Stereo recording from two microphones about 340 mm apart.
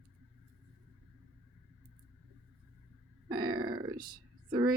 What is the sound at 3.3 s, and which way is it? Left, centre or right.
Grunt, centre.